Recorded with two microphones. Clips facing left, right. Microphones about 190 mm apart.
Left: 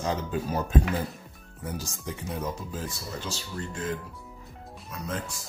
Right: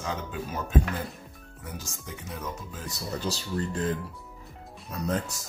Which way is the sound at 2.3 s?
30° left (ahead or behind).